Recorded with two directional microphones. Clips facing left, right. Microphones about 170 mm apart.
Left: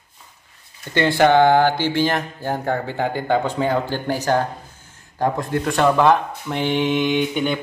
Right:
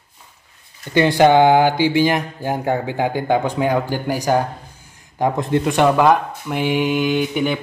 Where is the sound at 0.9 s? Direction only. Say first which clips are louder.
Right 2 dB; 15° right (ahead or behind).